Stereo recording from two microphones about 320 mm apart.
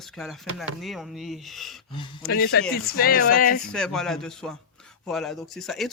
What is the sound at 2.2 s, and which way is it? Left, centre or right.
Speech, left.